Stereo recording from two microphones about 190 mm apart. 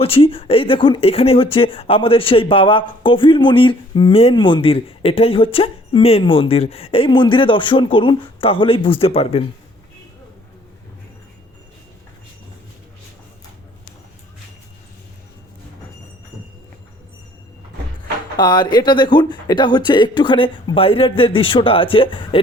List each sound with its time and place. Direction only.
0.0 s speech: 30° left (ahead or behind)
18.3 s speech: 20° left (ahead or behind)